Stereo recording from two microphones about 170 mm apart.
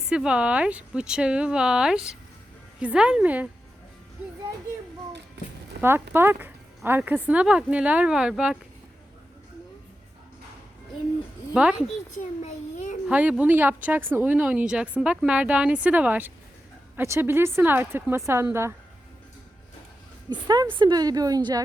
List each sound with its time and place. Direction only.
0.1 s speech: 5° right (ahead or behind)
5.7 s a sound: 70° right (ahead or behind)
6.1 s speech: 10° right (ahead or behind)
11.5 s speech: 5° right (ahead or behind)
12.1 s a child's voice: 45° left (ahead or behind)
13.1 s speech: 5° right (ahead or behind)
20.3 s a woman's voice: 25° right (ahead or behind)